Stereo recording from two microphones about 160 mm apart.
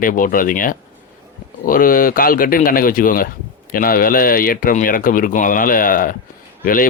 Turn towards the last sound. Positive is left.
turn(degrees=60)  # may be behind; listen again after turning